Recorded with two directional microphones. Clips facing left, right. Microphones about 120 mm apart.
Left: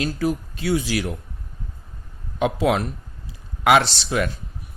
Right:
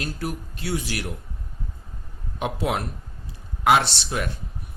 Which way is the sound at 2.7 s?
90° left.